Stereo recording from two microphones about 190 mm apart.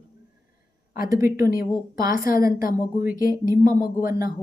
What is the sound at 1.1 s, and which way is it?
Speech, 15° right (ahead or behind).